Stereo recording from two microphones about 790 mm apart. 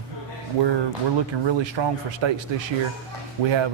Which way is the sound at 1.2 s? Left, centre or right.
Right.